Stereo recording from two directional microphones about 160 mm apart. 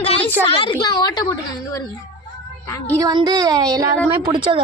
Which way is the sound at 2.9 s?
20° right (ahead or behind).